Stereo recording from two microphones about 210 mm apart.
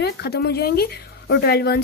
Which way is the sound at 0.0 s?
50° left (ahead or behind).